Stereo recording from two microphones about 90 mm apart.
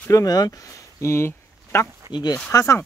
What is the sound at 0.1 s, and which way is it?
Speech, 45° left (ahead or behind).